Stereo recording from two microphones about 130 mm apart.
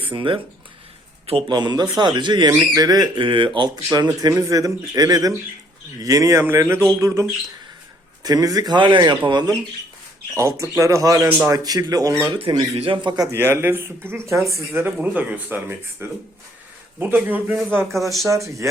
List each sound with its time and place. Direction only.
0.0 s speech: 40° right (ahead or behind)
10.3 s speech: 25° right (ahead or behind)
12.3 s speech: 40° right (ahead or behind)
13.3 s speech: 15° right (ahead or behind)
17.9 s speech: centre (ahead or behind)
18.3 s speech: 25° right (ahead or behind)